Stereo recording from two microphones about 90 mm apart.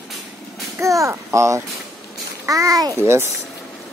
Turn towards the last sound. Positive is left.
turn(degrees=-30)  # may be behind; listen again after turning